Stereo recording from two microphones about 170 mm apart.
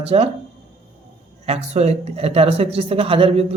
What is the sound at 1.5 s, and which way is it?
A man's voice, 40° right (ahead or behind).